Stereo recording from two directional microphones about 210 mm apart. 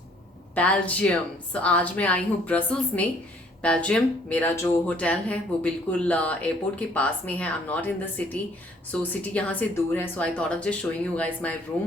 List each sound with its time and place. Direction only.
0.5 s a woman's voice: 5° left (ahead or behind)